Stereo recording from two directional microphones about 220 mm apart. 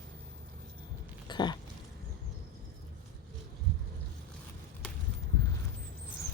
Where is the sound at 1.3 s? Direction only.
20° left (ahead or behind).